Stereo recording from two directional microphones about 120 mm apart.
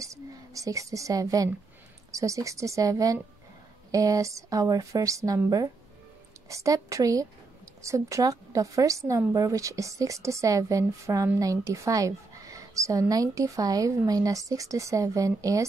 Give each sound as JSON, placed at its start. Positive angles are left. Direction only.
{"t": 0.0, "sound": "a woman's voice", "side_deg": -25}